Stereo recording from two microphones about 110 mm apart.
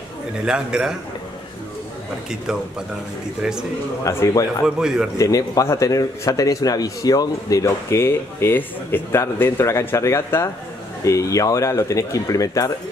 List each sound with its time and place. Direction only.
0.5 s a man's voice: 5° right (ahead or behind)
4.0 s a man's voice: 25° left (ahead or behind)
4.6 s a man's voice: 5° right (ahead or behind)
5.1 s a man's voice: 30° left (ahead or behind)